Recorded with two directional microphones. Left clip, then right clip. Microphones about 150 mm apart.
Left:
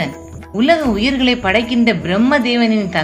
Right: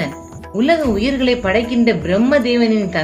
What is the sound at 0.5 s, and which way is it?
Speech, 15° left (ahead or behind).